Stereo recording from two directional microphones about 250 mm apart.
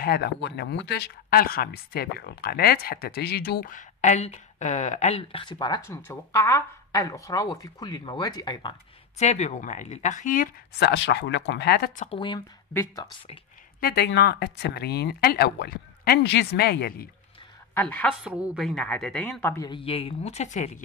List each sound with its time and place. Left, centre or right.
0.0 s speech: left; by 8.7 s centre
9.2 s speech: left
11.0 s speech: left
12.1 s speech: centre
13.7 s speech: left
17.7 s a woman's voice: centre
18.2 s speech: centre; by 20.8 s left